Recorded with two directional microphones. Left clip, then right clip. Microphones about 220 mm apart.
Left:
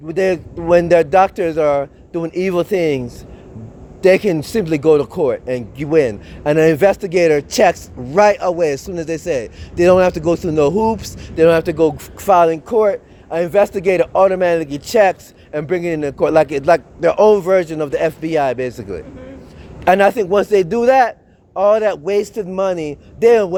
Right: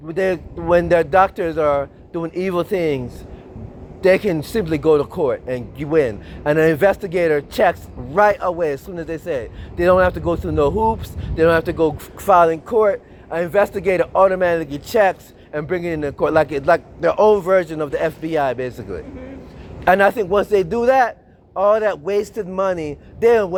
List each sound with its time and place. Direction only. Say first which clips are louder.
0.1 s speech: left 3 dB; 50° left (ahead or behind)